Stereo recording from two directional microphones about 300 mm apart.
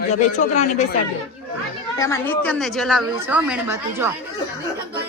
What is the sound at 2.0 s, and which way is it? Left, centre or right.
Speech, centre.